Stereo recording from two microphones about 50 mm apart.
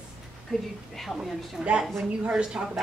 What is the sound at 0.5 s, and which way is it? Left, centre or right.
Speech, centre.